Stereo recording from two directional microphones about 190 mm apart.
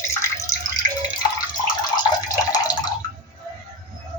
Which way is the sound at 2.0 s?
20° left (ahead or behind).